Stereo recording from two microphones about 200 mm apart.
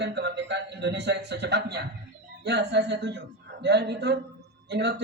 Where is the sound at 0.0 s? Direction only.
60° right (ahead or behind).